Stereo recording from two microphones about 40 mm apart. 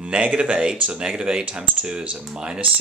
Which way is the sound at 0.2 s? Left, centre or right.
Right.